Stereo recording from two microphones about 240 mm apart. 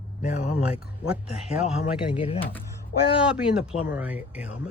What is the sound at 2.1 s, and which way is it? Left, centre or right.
Speech, left.